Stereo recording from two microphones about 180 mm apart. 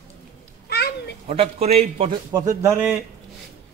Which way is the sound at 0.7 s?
60° left (ahead or behind).